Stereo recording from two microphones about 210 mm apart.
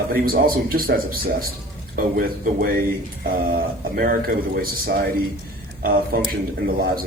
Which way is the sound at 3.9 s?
45° right (ahead or behind).